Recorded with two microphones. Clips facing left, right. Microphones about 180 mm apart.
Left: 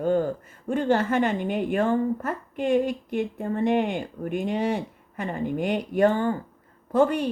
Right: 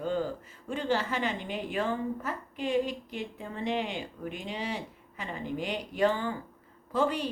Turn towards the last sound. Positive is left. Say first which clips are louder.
# left 7 dB
turn(degrees=50)  # may be behind; listen again after turning